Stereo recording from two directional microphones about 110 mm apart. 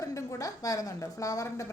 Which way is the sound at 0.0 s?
30° left (ahead or behind).